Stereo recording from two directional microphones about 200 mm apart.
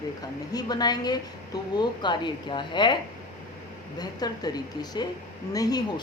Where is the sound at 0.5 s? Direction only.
20° left (ahead or behind).